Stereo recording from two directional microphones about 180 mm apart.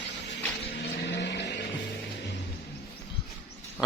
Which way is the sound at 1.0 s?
70° left (ahead or behind).